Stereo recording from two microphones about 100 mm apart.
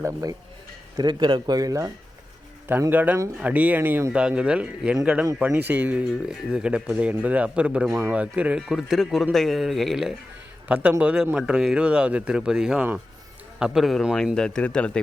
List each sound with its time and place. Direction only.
0.0 s speech: 35° right (ahead or behind)
0.9 s speech: 45° right (ahead or behind)
2.9 s speech: 15° right (ahead or behind)
4.2 s speech: 10° right (ahead or behind); by 14.9 s 10° left (ahead or behind)